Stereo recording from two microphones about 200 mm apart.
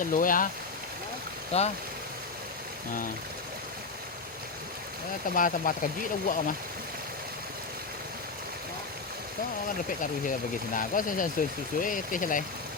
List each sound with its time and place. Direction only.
0.1 s speech: 45° left (ahead or behind)
1.5 s speech: 30° left (ahead or behind)
5.3 s speech: 45° left (ahead or behind)
10.8 s speech: 40° left (ahead or behind)